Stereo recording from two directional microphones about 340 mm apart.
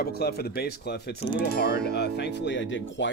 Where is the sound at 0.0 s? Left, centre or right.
Left.